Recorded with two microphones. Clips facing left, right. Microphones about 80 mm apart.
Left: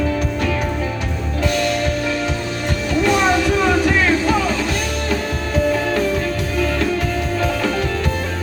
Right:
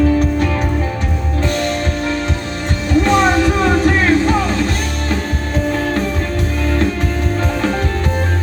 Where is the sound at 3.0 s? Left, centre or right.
Right.